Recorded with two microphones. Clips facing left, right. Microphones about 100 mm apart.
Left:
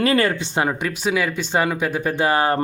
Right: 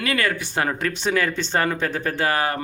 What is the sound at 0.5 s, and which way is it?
Speech, 15° left (ahead or behind).